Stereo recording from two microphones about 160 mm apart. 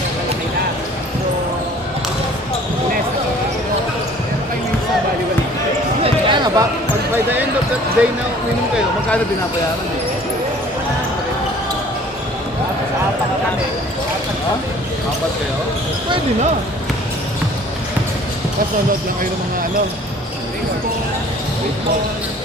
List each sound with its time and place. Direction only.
6.0 s basketball bounce: 30° right (ahead or behind)
8.0 s speech: 5° right (ahead or behind)